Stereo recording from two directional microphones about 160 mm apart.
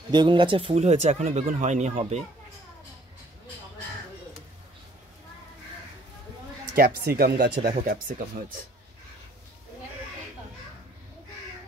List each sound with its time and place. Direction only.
0.1 s speech: 30° right (ahead or behind)
6.7 s speech: 70° right (ahead or behind)